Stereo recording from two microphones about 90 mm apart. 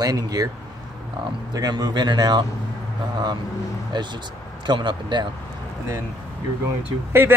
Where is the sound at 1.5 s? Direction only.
45° right (ahead or behind).